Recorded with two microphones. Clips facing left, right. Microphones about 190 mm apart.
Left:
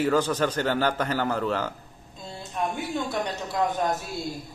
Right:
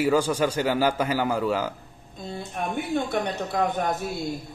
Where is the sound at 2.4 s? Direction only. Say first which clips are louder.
Even; 55° right (ahead or behind).